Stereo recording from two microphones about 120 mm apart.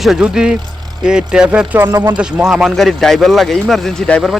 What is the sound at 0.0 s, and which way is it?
Speech, 5° right (ahead or behind).